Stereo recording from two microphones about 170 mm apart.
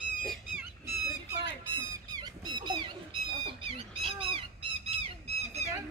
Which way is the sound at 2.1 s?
25° right (ahead or behind).